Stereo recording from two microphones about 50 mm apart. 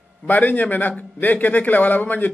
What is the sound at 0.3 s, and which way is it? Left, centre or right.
A man's voice, left.